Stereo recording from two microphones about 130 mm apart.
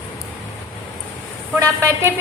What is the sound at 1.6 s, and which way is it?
Speech, 20° right (ahead or behind).